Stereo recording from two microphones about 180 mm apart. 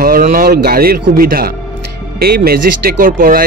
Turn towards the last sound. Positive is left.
turn(degrees=-50)  # may be behind; listen again after turning